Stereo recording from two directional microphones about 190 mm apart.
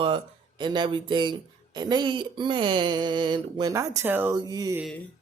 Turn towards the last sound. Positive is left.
turn(degrees=-20)  # may be behind; listen again after turning